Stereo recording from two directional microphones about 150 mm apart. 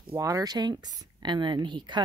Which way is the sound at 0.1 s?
20° right (ahead or behind).